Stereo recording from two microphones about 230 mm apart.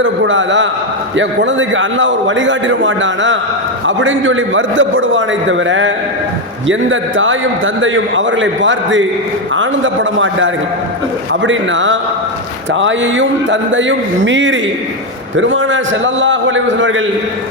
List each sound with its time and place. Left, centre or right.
0.0 s a man's voice: right